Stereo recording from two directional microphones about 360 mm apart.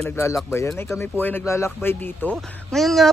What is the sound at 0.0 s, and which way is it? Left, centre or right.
Speech, centre.